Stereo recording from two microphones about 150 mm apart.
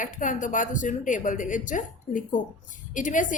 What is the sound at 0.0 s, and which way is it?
A woman's voice, 60° left (ahead or behind).